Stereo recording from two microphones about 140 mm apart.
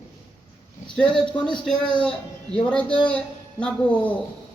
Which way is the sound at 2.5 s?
10° left (ahead or behind).